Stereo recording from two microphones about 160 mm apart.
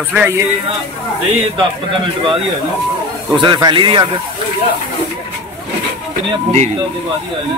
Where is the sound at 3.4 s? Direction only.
30° right (ahead or behind).